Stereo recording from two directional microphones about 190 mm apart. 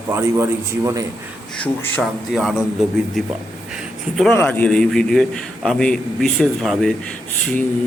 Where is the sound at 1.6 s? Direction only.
5° left (ahead or behind).